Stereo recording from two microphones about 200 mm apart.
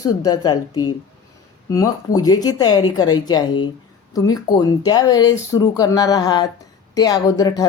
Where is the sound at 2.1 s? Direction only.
20° left (ahead or behind).